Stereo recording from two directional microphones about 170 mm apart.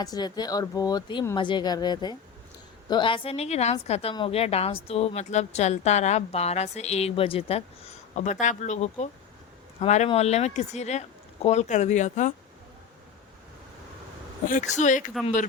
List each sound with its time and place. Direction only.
0.0 s speech: 25° left (ahead or behind); by 12.3 s 45° left (ahead or behind)
14.8 s speech: 50° left (ahead or behind)